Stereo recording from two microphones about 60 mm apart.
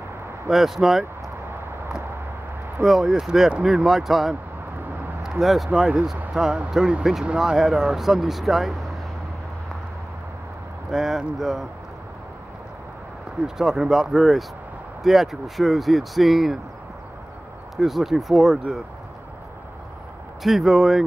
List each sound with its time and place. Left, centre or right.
0.5 s speech: centre
2.8 s speech: centre
7.3 s speech: centre
10.9 s speech: centre
13.6 s speech: centre
17.7 s speech: centre
20.4 s speech: centre